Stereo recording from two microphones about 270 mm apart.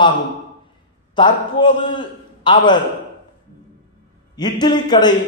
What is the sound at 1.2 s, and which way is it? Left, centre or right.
A man's voice, centre.